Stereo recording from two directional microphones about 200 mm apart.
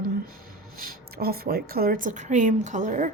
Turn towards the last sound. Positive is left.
turn(degrees=-40)  # may be behind; listen again after turning